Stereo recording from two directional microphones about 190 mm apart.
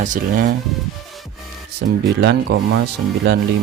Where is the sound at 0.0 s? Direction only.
45° right (ahead or behind).